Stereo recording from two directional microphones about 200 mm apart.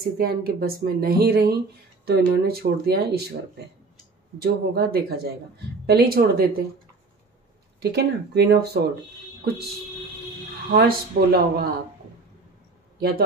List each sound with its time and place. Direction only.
0.2 s speech: 50° right (ahead or behind)
7.8 s speech: 55° right (ahead or behind)
10.7 s speech: 50° right (ahead or behind)